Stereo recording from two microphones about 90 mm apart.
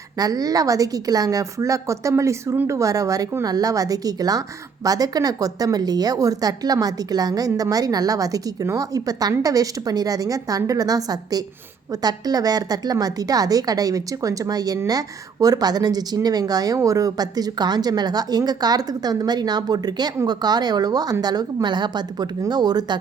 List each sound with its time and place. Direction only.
0.2 s a woman's voice: 45° right (ahead or behind)